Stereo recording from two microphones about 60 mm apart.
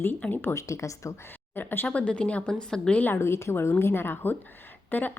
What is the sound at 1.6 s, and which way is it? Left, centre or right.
Speech, left.